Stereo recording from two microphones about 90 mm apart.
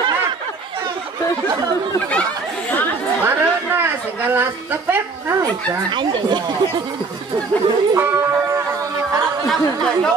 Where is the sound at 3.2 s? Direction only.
25° right (ahead or behind).